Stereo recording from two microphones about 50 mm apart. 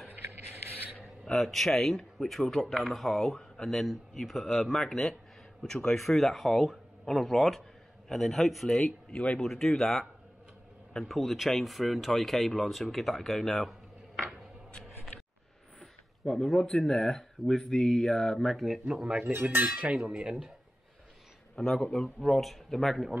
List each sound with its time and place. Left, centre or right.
1.2 s speech: centre
9.1 s speech: left
9.4 s speech: centre
15.8 s speech: centre
18.9 s speech: centre
19.7 s speech: right
21.5 s speech: centre